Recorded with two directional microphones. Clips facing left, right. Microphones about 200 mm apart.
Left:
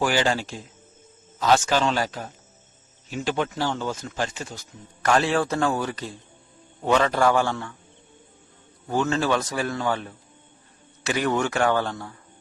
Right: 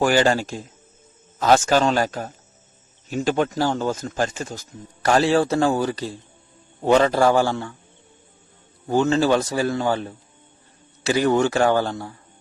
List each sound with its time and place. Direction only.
0.0 s a man's voice: 45° right (ahead or behind)
8.9 s a man's voice: 30° right (ahead or behind)